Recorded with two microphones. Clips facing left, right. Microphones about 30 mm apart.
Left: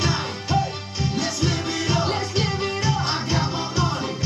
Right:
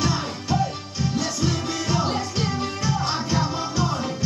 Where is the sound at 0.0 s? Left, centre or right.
Centre.